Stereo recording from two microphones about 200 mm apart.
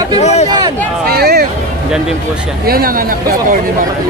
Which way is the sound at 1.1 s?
50° right (ahead or behind).